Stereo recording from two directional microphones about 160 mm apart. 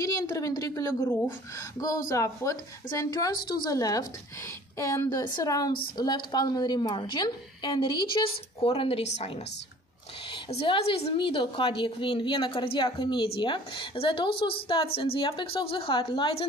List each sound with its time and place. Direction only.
0.0 s a woman's voice: 20° left (ahead or behind)